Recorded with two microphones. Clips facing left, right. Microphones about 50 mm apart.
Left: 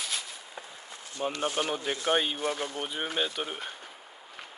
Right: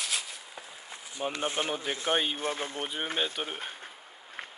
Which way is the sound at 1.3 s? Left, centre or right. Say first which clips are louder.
Left 1 dB; right.